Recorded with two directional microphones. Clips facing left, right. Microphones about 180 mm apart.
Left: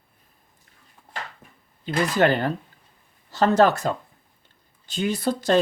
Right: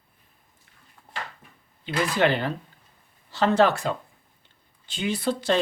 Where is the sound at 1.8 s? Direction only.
45° left (ahead or behind).